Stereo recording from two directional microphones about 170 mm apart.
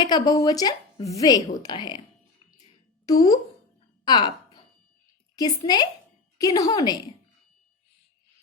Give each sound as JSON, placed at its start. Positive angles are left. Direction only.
{"t": 0.0, "sound": "speech", "side_deg": 25}
{"t": 3.1, "sound": "speech", "side_deg": 20}
{"t": 4.0, "sound": "a sound", "side_deg": 25}
{"t": 5.6, "sound": "speech", "side_deg": 25}